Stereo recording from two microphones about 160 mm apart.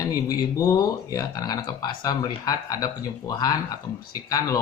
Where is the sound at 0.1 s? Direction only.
20° left (ahead or behind).